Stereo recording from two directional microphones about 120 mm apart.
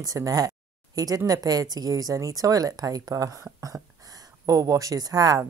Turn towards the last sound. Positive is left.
turn(degrees=-30)  # may be behind; listen again after turning